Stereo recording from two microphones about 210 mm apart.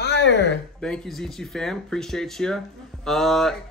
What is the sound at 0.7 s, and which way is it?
Speech, 5° left (ahead or behind).